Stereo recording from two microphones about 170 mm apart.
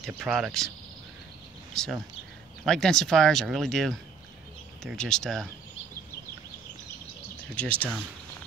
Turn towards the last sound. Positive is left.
turn(degrees=10)  # may be behind; listen again after turning